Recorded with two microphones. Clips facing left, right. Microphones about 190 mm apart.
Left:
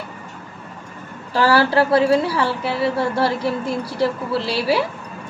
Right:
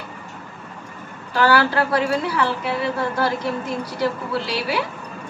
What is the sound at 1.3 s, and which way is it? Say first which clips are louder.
A woman's voice: left 2 dB; 30° left (ahead or behind).